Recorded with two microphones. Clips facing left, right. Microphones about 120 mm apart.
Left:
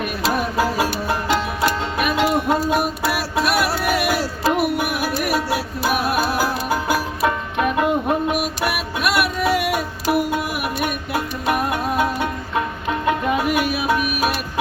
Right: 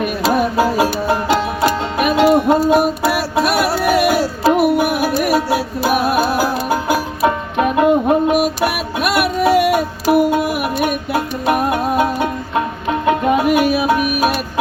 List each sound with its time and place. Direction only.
0.3 s music: 25° right (ahead or behind)
2.0 s music: 30° right (ahead or behind)
7.3 s music: 25° right (ahead or behind)